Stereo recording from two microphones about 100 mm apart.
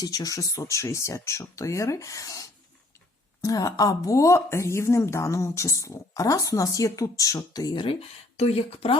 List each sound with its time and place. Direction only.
0.0 s a woman's voice: 40° left (ahead or behind)
8.4 s speech: 85° left